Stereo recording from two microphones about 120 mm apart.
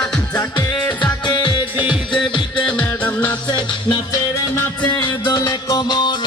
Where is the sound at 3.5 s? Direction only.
35° left (ahead or behind).